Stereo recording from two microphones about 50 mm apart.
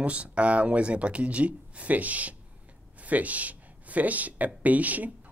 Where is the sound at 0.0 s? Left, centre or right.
Right.